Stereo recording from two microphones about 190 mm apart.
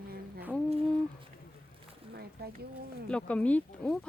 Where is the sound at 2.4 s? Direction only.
55° right (ahead or behind).